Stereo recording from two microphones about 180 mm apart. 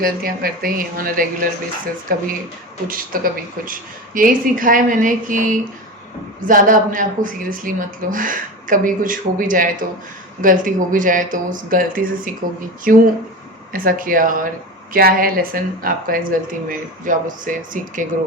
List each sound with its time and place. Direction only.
0.0 s speech: 55° right (ahead or behind)